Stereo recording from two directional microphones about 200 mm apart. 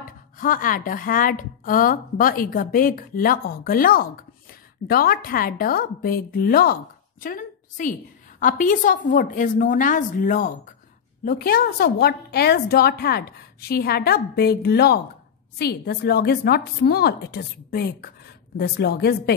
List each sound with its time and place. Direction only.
0.0 s a woman's voice: 45° left (ahead or behind)